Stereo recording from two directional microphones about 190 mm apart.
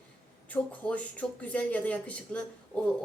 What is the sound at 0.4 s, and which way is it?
Speech, 10° left (ahead or behind).